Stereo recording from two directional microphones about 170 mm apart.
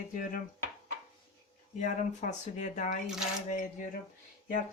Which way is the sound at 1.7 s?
45° left (ahead or behind).